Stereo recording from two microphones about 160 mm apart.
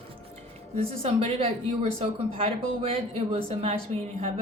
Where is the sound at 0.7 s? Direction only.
40° right (ahead or behind).